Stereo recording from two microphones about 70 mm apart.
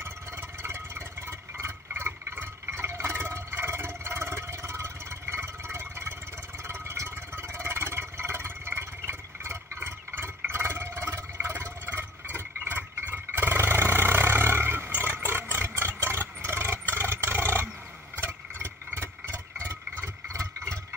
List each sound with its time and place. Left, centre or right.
0.0 s vehicle: right
17.3 s roar: right
18.1 s engine: right
20.3 s vehicle: right